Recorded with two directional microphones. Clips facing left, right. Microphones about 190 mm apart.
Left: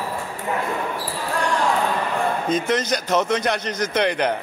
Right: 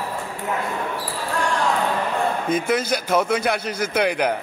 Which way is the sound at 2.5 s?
10° right (ahead or behind).